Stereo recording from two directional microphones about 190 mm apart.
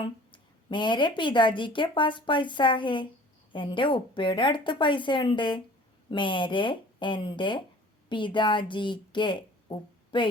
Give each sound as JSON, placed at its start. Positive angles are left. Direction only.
{"t": 0.0, "sound": "a woman's voice", "side_deg": 25}